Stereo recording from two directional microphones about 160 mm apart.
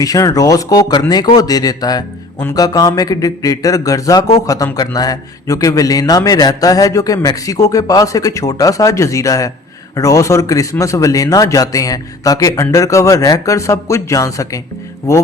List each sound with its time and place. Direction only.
0.0 s a man's voice: 20° left (ahead or behind)